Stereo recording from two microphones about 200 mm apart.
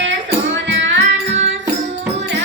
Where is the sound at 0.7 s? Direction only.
65° right (ahead or behind).